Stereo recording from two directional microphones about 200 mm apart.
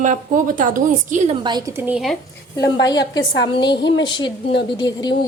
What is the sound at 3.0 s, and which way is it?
Speech, 60° left (ahead or behind).